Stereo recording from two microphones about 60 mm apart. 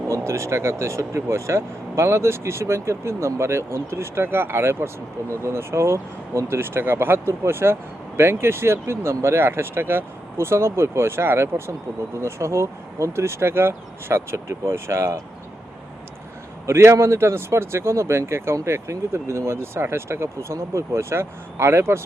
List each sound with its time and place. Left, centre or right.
0.1 s speech: right
16.6 s speech: right